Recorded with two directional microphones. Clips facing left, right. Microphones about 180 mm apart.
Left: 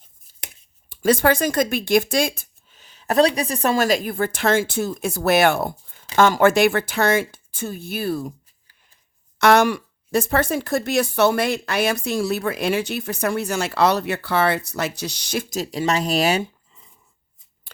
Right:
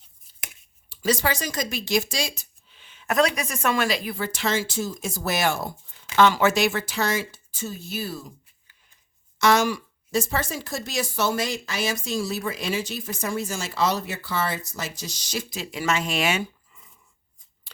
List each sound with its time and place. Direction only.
0.9 s speech: 55° left (ahead or behind)
9.4 s speech: 60° left (ahead or behind); by 16.4 s 40° left (ahead or behind)
16.4 s a sound: 25° left (ahead or behind)